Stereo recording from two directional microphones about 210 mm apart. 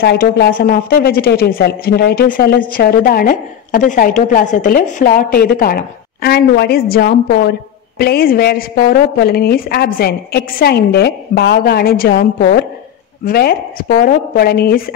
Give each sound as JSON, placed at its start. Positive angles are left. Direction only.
{"t": 0.0, "sound": "a woman's voice", "side_deg": 50}